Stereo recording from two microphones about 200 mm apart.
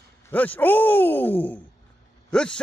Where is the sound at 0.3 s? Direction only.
10° left (ahead or behind).